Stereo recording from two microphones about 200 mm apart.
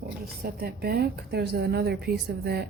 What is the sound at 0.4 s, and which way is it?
A woman's voice, 50° right (ahead or behind).